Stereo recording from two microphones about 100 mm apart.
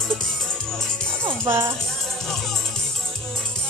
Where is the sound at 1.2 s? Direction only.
25° right (ahead or behind).